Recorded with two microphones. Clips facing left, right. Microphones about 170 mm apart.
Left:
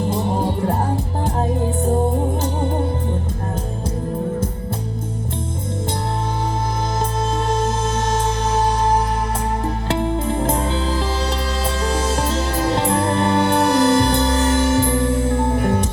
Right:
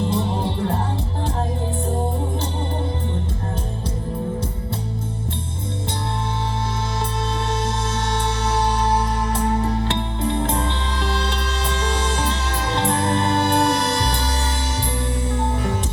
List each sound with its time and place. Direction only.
7.4 s music: 40° left (ahead or behind)